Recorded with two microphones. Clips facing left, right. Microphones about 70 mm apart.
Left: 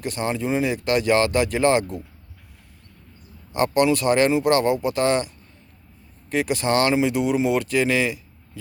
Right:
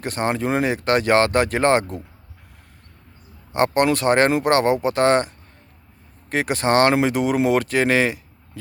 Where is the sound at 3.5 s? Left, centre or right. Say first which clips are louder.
Right 1 dB; right.